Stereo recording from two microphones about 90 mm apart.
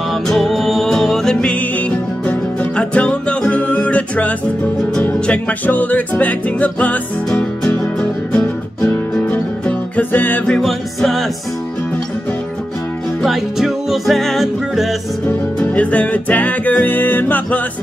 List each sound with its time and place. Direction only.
0.1 s music: centre (ahead or behind); by 10.4 s 20° left (ahead or behind)
10.4 s music: 5° left (ahead or behind)
13.2 s music: centre (ahead or behind)
15.2 s music: 15° left (ahead or behind)